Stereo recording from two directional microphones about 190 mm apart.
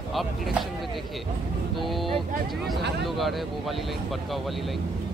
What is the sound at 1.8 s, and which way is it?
Speech, centre (ahead or behind).